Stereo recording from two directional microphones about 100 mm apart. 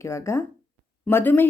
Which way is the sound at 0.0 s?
30° left (ahead or behind).